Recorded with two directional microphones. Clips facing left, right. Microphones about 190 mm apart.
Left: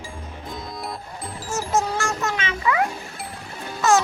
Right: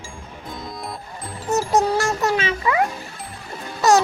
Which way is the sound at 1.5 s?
40° right (ahead or behind).